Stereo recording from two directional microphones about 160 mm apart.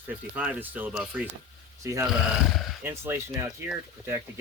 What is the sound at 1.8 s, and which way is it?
Speech, 20° right (ahead or behind).